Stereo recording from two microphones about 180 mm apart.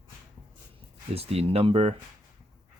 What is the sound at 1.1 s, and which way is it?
Speech, 35° right (ahead or behind).